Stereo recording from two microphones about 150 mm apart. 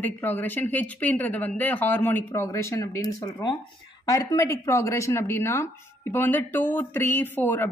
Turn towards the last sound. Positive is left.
turn(degrees=15)  # may be behind; listen again after turning